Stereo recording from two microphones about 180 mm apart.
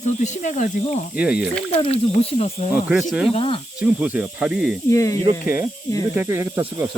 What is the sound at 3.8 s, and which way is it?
Speech, 10° right (ahead or behind).